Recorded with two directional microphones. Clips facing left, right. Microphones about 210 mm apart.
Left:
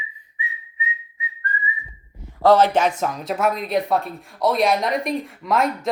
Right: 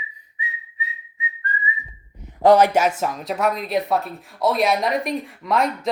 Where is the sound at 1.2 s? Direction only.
25° right (ahead or behind).